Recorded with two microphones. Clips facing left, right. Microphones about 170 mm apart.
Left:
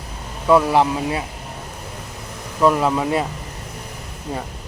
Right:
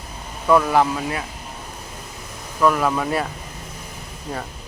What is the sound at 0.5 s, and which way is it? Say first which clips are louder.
Speech: left 2 dB; 25° left (ahead or behind).